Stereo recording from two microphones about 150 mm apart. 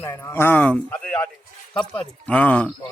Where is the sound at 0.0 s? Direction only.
15° left (ahead or behind).